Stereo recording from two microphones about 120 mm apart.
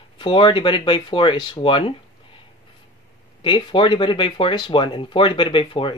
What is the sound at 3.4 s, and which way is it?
Speech, 45° left (ahead or behind).